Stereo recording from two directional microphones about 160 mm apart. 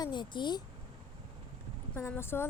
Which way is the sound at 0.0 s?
30° left (ahead or behind).